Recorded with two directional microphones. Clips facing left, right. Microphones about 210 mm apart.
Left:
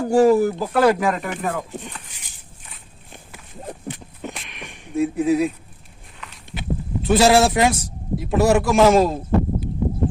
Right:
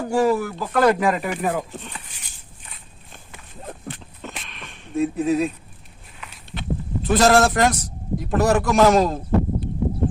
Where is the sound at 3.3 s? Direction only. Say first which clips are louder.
Left 2 dB; 15° left (ahead or behind).